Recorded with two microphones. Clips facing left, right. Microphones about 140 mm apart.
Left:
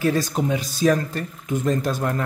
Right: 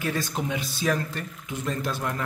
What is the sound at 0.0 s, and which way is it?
Speech, 35° left (ahead or behind).